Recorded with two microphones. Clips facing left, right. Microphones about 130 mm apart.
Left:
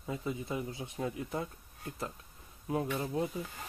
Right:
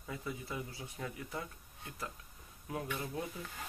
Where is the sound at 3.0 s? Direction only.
30° left (ahead or behind).